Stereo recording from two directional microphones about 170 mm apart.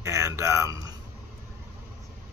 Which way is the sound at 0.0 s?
15° right (ahead or behind).